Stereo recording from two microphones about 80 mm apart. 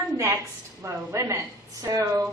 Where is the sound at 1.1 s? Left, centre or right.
Right.